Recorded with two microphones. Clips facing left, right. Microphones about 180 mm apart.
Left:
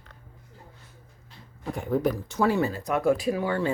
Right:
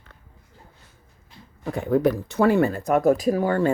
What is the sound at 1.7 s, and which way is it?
Speech, 70° right (ahead or behind).